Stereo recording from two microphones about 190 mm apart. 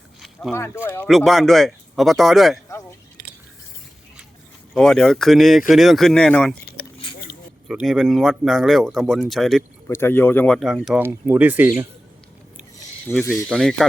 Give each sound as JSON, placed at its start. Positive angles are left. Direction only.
{"t": 0.2, "sound": "a sound", "side_deg": 0}
{"t": 0.5, "sound": "speech", "side_deg": 15}
{"t": 1.0, "sound": "speech", "side_deg": 0}
{"t": 4.7, "sound": "speech", "side_deg": 5}
{"t": 7.0, "sound": "a sound", "side_deg": 25}
{"t": 7.7, "sound": "speech", "side_deg": -5}
{"t": 9.9, "sound": "speech", "side_deg": 10}
{"t": 13.1, "sound": "speech", "side_deg": 10}